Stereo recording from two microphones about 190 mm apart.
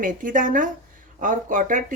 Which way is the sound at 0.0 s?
45° right (ahead or behind).